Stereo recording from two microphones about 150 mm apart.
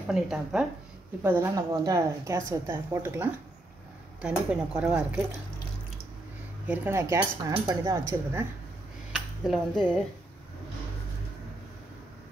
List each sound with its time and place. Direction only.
0.0 s a woman's voice: 5° right (ahead or behind)
1.2 s a woman's voice: 15° right (ahead or behind)
6.7 s a woman's voice: 15° right (ahead or behind)
9.1 s speech: 5° right (ahead or behind)